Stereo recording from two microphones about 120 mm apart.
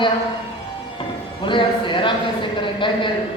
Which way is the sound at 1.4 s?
45° left (ahead or behind).